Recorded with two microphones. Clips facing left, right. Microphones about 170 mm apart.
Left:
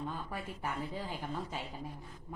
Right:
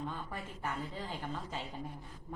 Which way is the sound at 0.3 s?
10° left (ahead or behind).